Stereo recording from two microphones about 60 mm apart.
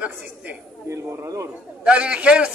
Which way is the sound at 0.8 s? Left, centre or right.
Right.